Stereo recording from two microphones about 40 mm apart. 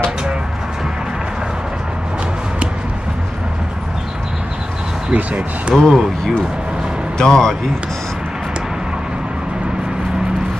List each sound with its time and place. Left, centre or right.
5.1 s speech: right
5.8 s speech: centre